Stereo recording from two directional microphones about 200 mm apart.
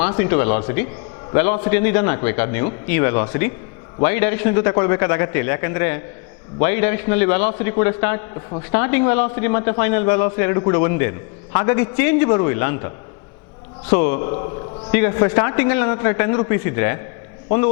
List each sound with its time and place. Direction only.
0.0 s a man's voice: 10° left (ahead or behind)